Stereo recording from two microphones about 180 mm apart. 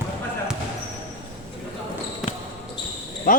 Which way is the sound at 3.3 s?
50° left (ahead or behind).